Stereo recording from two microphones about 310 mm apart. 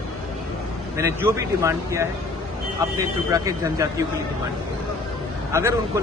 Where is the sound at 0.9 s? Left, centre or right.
Centre.